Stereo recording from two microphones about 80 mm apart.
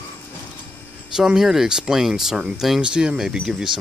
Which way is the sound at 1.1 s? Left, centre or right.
Centre.